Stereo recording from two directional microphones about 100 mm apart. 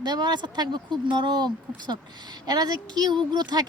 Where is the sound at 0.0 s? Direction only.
45° right (ahead or behind).